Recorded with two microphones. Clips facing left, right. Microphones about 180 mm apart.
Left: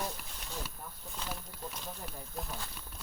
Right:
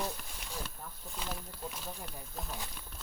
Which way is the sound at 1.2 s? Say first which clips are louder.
Right 1 dB; 10° right (ahead or behind).